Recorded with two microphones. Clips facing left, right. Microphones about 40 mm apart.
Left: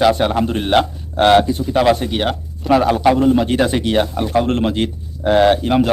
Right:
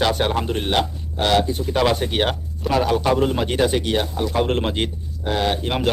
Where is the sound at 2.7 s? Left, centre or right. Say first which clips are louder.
Left 6 dB; centre.